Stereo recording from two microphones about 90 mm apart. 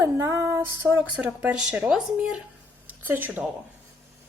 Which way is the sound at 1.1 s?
15° right (ahead or behind).